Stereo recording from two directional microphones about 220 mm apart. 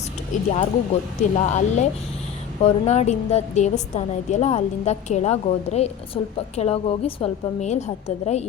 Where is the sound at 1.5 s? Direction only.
30° left (ahead or behind).